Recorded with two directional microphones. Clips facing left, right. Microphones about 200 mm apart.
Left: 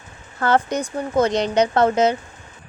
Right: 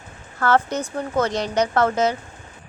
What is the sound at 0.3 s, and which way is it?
Speech, 15° left (ahead or behind).